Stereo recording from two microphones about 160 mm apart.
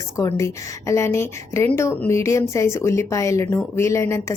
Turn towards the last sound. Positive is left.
turn(degrees=15)  # may be behind; listen again after turning